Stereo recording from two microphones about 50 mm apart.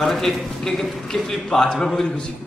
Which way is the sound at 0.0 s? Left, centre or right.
Centre.